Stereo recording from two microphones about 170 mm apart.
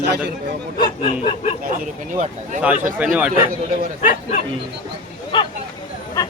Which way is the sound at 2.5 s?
50° right (ahead or behind).